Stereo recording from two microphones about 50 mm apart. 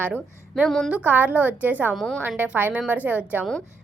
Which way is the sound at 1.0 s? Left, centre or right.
Right.